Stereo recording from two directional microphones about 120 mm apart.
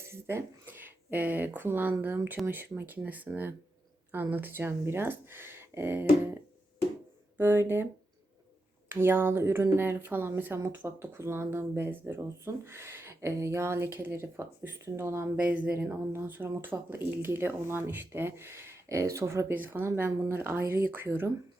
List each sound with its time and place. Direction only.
0.0 s speech: 20° right (ahead or behind)
8.9 s speech: 20° right (ahead or behind)